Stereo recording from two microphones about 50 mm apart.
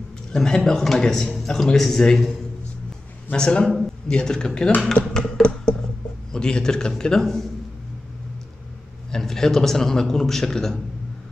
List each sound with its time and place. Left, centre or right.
0.3 s a man's voice: centre
3.3 s a man's voice: centre
4.9 s a sound: centre
6.3 s a man's voice: centre
9.1 s a man's voice: centre